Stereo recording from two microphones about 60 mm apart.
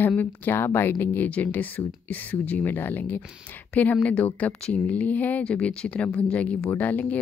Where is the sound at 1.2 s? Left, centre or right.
Left.